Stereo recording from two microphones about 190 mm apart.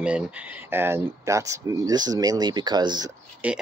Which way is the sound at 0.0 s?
5° right (ahead or behind).